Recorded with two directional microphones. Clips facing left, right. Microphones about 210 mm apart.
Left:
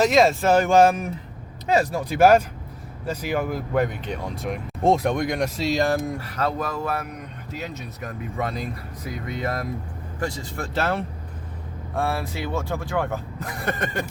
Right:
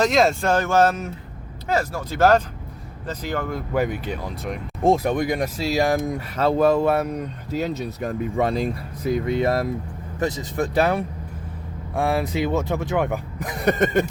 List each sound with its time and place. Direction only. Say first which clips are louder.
0.0 s speech: left 1 dB; centre (ahead or behind)
3.8 s speech: right 1 dB; 5° right (ahead or behind)
5.8 s speech: right 2 dB; 15° right (ahead or behind)